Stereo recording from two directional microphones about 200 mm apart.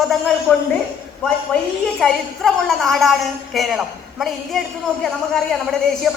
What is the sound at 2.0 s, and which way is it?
A woman's voice, centre (ahead or behind).